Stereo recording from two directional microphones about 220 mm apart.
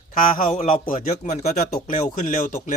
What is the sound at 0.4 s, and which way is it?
A man's voice, 35° left (ahead or behind).